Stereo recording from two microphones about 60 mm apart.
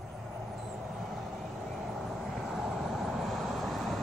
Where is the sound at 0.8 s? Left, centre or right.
Centre.